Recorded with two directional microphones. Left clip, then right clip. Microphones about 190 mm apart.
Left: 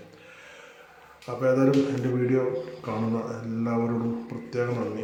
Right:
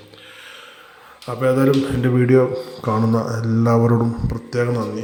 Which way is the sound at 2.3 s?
35° right (ahead or behind).